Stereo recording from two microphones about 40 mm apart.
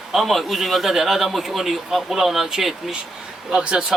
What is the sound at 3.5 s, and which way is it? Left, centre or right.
Speech, right.